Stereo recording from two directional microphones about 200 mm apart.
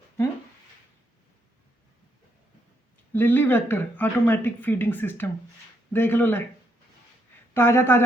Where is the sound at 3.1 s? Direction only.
10° left (ahead or behind).